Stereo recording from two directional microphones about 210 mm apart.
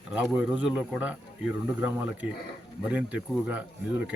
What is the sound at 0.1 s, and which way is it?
Speech, 5° right (ahead or behind).